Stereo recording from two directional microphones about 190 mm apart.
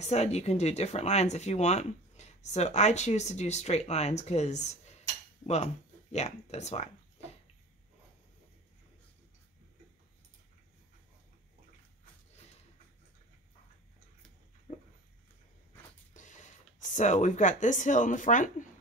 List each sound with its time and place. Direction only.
0.0 s speech: 35° left (ahead or behind)
6.1 s speech: 35° left (ahead or behind)
14.7 s a sound: 40° left (ahead or behind)
16.1 s printer: 40° left (ahead or behind)
16.9 s speech: 40° left (ahead or behind)